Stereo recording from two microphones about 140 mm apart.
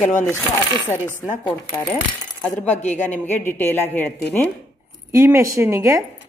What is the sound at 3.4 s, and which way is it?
A woman's voice, 15° left (ahead or behind).